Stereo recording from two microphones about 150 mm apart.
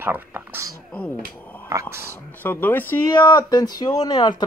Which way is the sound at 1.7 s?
20° right (ahead or behind).